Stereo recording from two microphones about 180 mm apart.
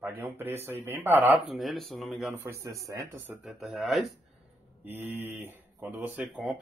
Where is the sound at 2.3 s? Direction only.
15° right (ahead or behind).